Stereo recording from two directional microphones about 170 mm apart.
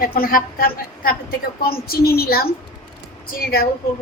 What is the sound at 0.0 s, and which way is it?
A woman's voice, 60° left (ahead or behind).